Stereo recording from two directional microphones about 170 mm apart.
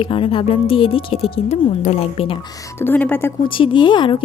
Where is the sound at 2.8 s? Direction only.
10° left (ahead or behind).